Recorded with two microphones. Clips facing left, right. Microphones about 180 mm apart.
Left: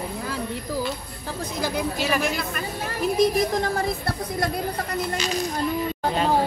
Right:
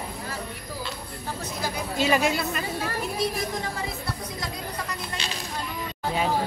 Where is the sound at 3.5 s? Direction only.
85° left.